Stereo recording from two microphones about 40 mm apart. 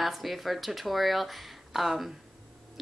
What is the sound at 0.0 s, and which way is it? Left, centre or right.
A woman's voice, centre.